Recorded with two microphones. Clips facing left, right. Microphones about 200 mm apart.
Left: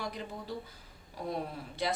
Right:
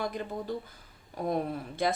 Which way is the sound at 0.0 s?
50° right (ahead or behind).